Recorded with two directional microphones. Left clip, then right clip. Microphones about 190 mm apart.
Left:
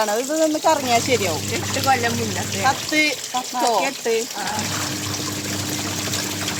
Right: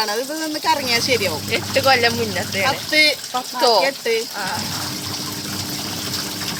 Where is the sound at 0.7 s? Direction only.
40° left (ahead or behind).